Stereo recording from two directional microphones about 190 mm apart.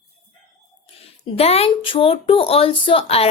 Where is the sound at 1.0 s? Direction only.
30° left (ahead or behind).